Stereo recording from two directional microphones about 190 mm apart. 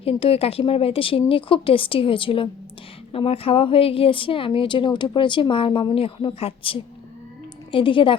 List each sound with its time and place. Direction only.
0.0 s a woman's voice: 30° left (ahead or behind)